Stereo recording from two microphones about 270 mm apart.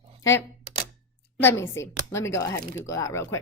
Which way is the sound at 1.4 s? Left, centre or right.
Centre.